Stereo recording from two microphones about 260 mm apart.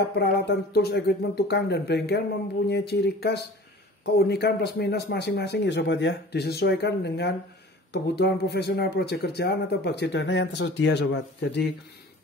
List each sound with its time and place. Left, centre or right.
0.2 s speech: left